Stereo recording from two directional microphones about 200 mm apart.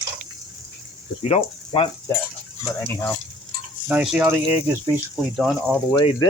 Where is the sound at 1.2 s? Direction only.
30° left (ahead or behind).